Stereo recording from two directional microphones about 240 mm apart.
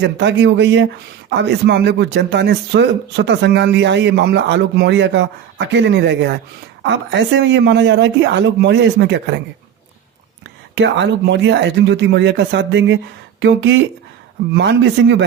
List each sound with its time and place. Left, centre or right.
0.0 s speech: right
10.8 s speech: right